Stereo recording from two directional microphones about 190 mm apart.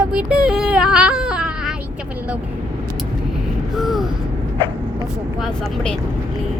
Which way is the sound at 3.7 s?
Centre (ahead or behind).